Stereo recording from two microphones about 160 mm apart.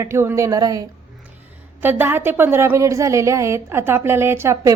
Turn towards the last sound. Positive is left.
turn(degrees=-15)  # may be behind; listen again after turning